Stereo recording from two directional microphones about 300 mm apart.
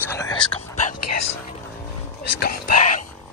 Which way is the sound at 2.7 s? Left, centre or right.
Left.